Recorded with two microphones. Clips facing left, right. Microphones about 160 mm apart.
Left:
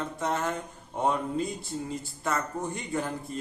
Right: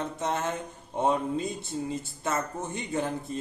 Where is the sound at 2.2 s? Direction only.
20° right (ahead or behind).